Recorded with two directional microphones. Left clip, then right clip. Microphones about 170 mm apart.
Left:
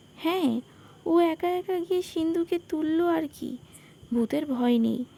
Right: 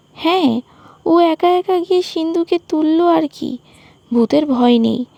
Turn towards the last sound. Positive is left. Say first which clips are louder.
# right 12 dB
turn(degrees=-40)  # may be behind; listen again after turning